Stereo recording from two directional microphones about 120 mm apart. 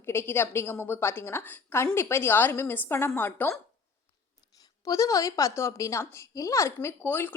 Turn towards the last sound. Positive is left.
turn(degrees=15)  # may be behind; listen again after turning